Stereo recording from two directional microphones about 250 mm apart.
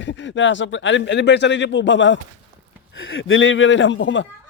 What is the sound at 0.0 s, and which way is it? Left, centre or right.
Speech, left.